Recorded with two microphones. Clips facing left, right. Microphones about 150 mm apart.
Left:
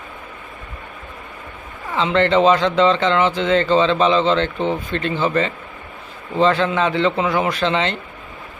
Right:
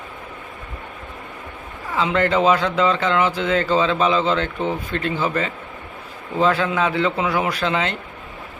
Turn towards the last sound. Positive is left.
turn(degrees=-5)  # may be behind; listen again after turning